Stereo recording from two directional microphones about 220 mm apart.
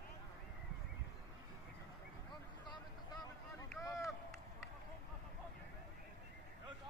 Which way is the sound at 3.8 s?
15° left (ahead or behind).